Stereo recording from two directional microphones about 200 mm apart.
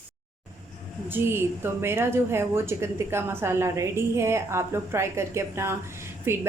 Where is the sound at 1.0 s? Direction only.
10° right (ahead or behind).